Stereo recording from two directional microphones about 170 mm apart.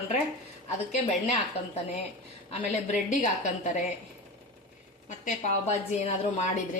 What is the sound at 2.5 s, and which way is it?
A woman's voice, 40° left (ahead or behind).